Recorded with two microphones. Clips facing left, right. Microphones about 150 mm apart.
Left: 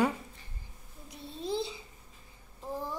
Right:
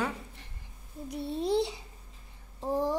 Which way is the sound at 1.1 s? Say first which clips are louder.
Right 7 dB; 75° right (ahead or behind).